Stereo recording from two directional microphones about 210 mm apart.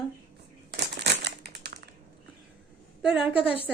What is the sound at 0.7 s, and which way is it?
Crumpling, 55° right (ahead or behind).